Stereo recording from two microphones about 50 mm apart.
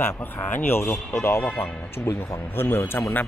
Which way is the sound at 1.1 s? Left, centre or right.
Left.